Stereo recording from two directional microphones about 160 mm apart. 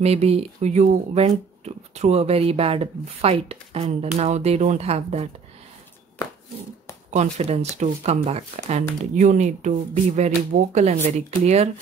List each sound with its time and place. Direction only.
0.0 s speech: 40° right (ahead or behind)
7.1 s speech: 45° right (ahead or behind)